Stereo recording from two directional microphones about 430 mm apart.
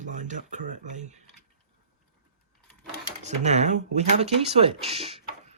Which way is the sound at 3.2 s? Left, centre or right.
Centre.